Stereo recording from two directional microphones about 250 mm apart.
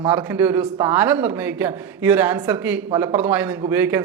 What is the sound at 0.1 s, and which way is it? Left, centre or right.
A man's voice, centre.